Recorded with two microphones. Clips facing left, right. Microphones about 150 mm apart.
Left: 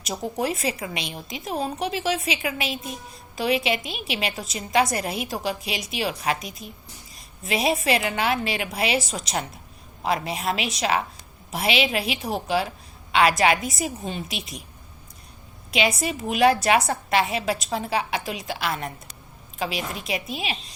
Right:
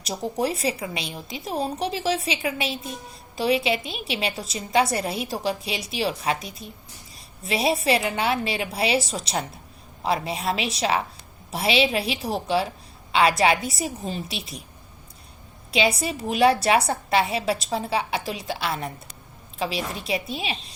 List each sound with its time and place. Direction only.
0.3 s a woman's voice: 35° right (ahead or behind)
15.7 s a woman's voice: 30° right (ahead or behind)